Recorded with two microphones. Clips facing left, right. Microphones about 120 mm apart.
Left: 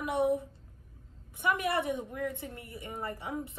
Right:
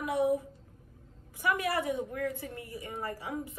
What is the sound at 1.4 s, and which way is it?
A woman's voice, 20° left (ahead or behind).